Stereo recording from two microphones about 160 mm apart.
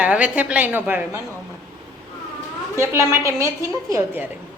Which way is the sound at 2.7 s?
15° right (ahead or behind).